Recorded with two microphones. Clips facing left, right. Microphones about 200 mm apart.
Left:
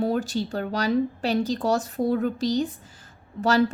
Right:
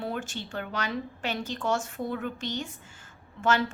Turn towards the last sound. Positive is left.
turn(degrees=35)  # may be behind; listen again after turning